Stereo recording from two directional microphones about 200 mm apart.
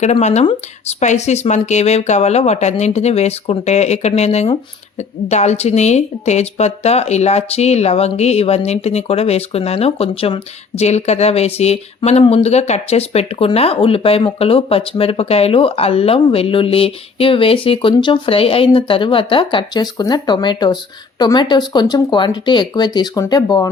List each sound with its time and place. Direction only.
0.0 s speech: 35° left (ahead or behind); by 23.6 s 20° left (ahead or behind)